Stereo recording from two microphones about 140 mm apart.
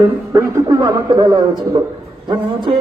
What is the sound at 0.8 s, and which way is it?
Speech, 25° right (ahead or behind).